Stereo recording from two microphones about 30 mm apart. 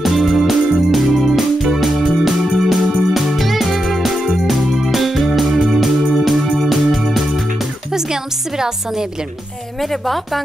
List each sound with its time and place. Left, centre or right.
0.0 s organ: centre
6.1 s music: centre
7.9 s music: centre
9.8 s a woman's voice: centre